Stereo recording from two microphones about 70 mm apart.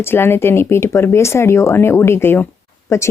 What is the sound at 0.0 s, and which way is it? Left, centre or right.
Speech, left.